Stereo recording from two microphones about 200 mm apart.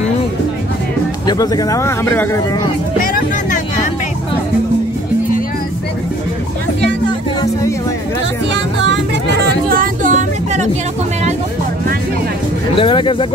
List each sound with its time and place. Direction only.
1.2 s speech: 20° left (ahead or behind)
3.0 s music: 45° left (ahead or behind)
8.5 s music: 60° right (ahead or behind)
9.7 s a sound: 40° right (ahead or behind)
12.7 s speech: 25° left (ahead or behind)